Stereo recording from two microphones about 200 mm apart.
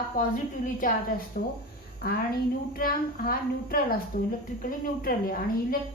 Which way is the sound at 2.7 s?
45° left (ahead or behind).